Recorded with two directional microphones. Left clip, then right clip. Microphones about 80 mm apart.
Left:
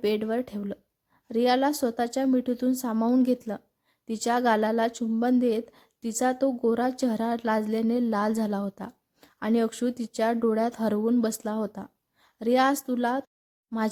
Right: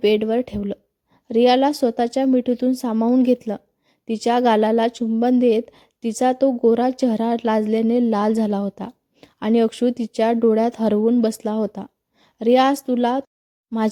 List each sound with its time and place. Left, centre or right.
0.0 s a woman's voice: right
2.9 s a woman's voice: centre
3.2 s a woman's voice: right